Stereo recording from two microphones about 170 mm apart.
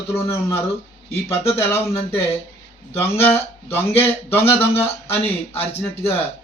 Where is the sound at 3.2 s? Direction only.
10° left (ahead or behind).